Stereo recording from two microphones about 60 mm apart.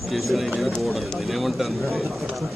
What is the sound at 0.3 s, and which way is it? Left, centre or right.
Speech, centre.